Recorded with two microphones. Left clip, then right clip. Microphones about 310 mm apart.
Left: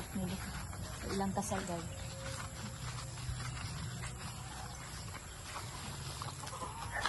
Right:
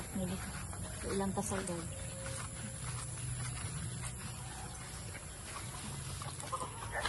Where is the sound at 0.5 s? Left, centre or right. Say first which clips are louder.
Even; centre.